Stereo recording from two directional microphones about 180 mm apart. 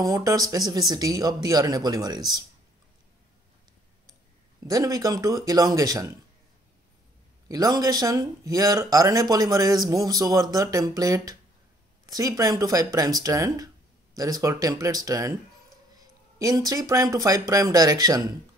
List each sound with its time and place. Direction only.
0.0 s speech: 20° right (ahead or behind)
4.6 s speech: 20° right (ahead or behind)
7.4 s speech: 20° right (ahead or behind)